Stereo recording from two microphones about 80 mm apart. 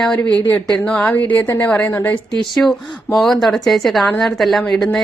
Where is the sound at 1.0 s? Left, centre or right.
Left.